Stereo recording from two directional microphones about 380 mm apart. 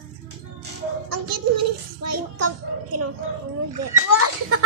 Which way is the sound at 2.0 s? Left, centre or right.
Right.